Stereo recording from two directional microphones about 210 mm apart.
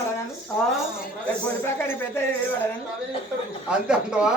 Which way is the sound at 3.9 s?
5° right (ahead or behind).